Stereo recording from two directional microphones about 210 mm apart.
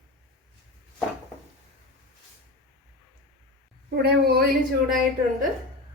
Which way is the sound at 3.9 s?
50° right (ahead or behind).